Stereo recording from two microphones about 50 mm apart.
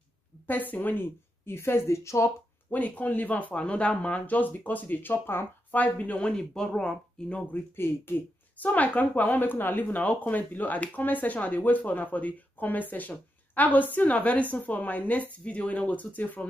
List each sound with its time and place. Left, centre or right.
0.5 s speech: left
1.4 s a woman's voice: left
2.7 s speech: left
5.8 s speech: left
6.3 s speech: centre
7.5 s speech: left
8.5 s speech: left